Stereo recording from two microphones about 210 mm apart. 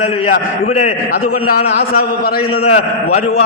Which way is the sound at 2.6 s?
30° left (ahead or behind).